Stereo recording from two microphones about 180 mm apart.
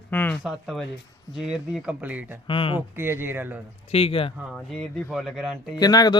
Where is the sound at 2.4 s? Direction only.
30° left (ahead or behind).